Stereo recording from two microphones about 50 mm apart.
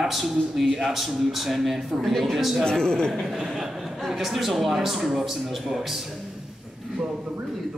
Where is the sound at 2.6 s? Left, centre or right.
Centre.